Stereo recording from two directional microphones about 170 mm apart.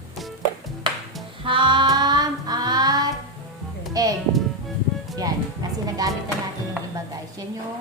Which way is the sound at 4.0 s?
20° right (ahead or behind).